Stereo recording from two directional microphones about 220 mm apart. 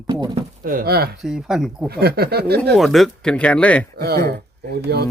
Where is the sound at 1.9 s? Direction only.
45° right (ahead or behind).